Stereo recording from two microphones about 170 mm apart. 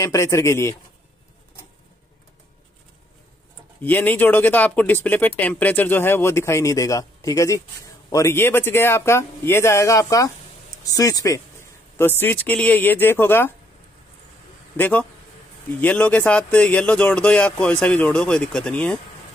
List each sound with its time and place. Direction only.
0.0 s speech: 20° left (ahead or behind)
3.8 s speech: 10° left (ahead or behind)
14.8 s speech: 10° left (ahead or behind)